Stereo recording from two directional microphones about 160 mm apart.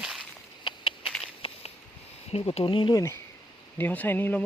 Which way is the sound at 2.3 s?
35° left (ahead or behind).